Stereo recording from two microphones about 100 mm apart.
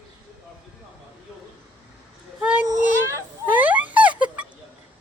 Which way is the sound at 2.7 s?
25° right (ahead or behind).